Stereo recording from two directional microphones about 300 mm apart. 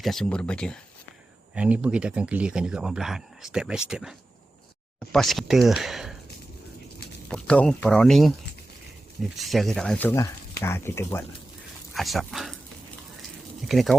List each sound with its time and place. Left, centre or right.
0.0 s speech: centre
7.3 s speech: centre
9.4 s speech: centre
13.7 s speech: centre